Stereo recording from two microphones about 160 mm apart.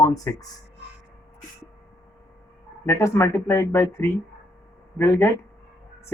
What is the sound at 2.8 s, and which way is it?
Speech, 15° left (ahead or behind).